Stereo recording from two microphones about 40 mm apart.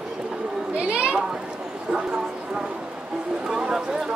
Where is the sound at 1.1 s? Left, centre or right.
Centre.